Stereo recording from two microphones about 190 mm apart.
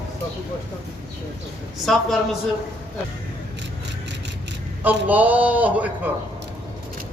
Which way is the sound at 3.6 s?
65° right (ahead or behind).